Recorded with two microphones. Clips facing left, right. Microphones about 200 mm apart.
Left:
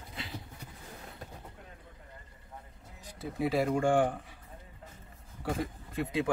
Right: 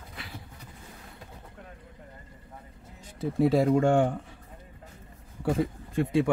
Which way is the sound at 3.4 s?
25° right (ahead or behind).